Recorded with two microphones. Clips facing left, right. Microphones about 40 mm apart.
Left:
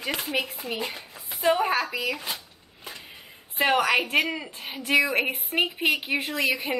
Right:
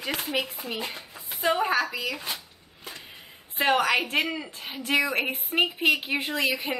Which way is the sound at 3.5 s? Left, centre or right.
Centre.